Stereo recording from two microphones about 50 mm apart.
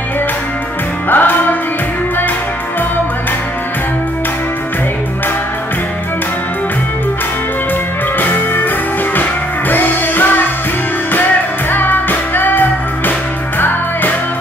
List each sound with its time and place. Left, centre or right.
1.0 s music: left
8.2 s music: left
11.7 s music: left